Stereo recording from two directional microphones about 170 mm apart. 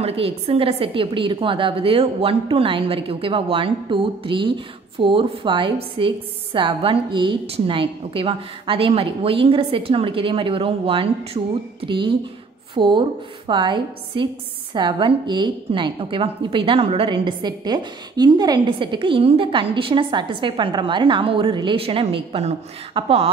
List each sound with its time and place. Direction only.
0.0 s a woman's voice: 35° right (ahead or behind)